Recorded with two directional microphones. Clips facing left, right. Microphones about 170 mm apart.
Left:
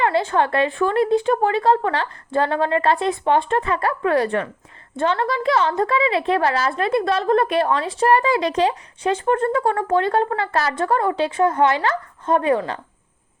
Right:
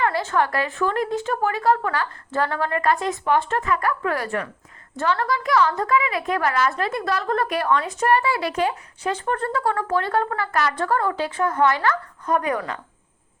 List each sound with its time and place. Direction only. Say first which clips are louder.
0.0 s a woman's voice: left 3 dB; 20° left (ahead or behind)
8.1 s a woman's voice: left 3 dB; 20° left (ahead or behind)